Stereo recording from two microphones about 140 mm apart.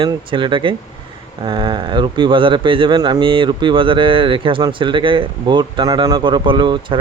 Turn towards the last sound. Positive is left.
turn(degrees=-35)  # may be behind; listen again after turning